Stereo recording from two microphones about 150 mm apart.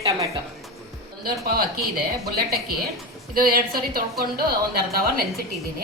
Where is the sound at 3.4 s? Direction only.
75° right (ahead or behind).